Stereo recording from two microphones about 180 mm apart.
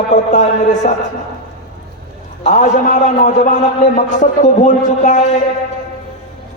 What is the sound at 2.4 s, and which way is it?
A man's voice, 40° left (ahead or behind).